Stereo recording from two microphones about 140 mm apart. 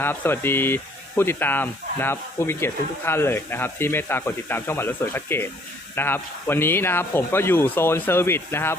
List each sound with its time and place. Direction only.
0.0 s speech: 15° left (ahead or behind)